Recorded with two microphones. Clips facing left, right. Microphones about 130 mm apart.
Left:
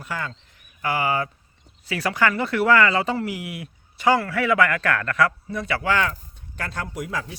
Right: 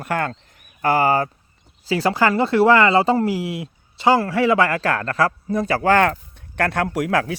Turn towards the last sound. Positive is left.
turn(degrees=-70)  # may be behind; listen again after turning